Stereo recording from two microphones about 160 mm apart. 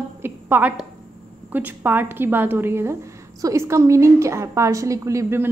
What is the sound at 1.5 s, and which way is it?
A woman's voice, 10° right (ahead or behind).